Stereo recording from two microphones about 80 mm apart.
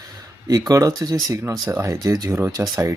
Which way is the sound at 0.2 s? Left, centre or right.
Right.